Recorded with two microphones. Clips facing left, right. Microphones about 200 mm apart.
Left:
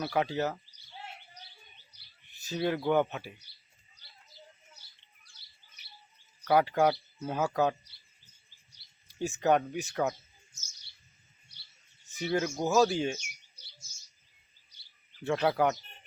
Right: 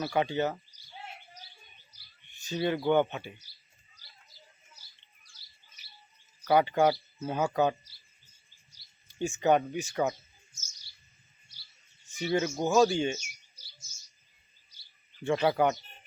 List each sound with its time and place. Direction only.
0.0 s speech: centre (ahead or behind)
2.4 s speech: centre (ahead or behind)
5.4 s bird: 60° left (ahead or behind)
6.4 s speech: centre (ahead or behind)
9.0 s speech: centre (ahead or behind)
12.2 s speech: centre (ahead or behind)
15.2 s speech: centre (ahead or behind)